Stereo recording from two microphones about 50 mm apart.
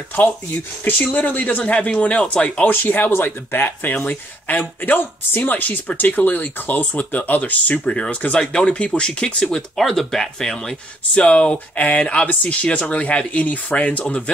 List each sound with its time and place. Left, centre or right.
0.8 s speech: left
2.7 s speech: left
9.4 s speech: centre
11.2 s speech: left